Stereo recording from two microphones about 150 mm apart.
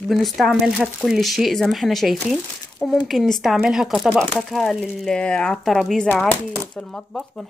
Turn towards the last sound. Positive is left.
turn(degrees=5)  # may be behind; listen again after turning